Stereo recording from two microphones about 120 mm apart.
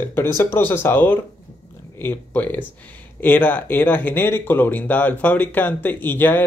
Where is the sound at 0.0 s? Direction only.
20° left (ahead or behind).